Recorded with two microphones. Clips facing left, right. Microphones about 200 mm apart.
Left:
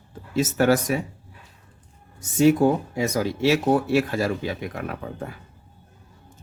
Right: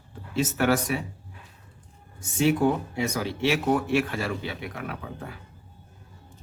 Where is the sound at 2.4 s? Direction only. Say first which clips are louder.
Left 5 dB; 40° left (ahead or behind).